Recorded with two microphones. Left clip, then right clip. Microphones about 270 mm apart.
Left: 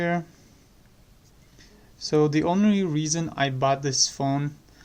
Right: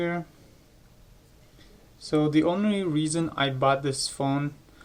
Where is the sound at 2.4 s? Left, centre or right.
Left.